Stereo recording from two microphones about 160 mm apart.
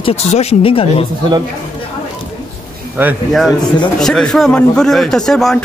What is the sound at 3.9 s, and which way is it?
Speech, 5° left (ahead or behind).